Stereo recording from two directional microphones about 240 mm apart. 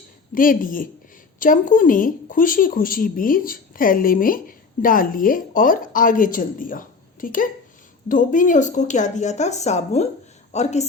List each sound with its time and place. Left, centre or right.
0.3 s a woman's voice: left